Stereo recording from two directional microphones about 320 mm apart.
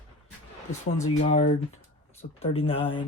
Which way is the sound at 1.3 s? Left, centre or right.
Left.